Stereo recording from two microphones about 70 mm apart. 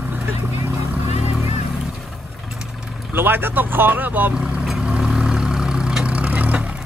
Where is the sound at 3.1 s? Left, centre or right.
Right.